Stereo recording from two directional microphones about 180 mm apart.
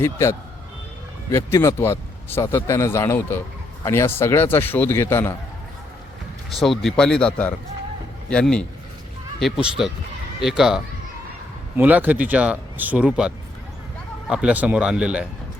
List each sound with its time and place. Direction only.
0.0 s speech: 15° left (ahead or behind)
6.5 s speech: centre (ahead or behind)